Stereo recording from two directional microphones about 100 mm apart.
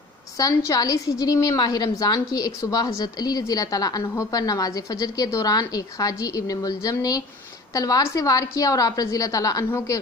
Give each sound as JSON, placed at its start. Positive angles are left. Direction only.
{"t": 0.7, "sound": "a woman's voice", "side_deg": 35}